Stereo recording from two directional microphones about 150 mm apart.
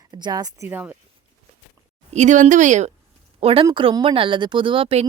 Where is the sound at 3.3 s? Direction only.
35° right (ahead or behind).